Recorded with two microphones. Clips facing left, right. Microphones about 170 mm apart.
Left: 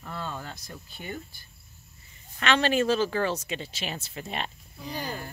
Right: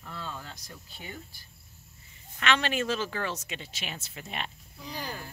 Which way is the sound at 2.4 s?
35° left (ahead or behind).